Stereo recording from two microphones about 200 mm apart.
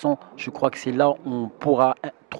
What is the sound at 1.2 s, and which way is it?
Speech, 25° right (ahead or behind).